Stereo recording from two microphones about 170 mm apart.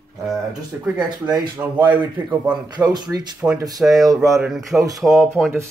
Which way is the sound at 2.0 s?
25° right (ahead or behind).